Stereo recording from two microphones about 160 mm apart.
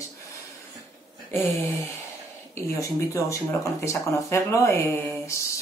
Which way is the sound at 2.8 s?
20° left (ahead or behind).